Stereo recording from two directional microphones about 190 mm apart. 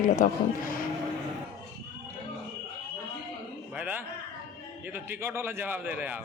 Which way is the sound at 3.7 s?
10° right (ahead or behind).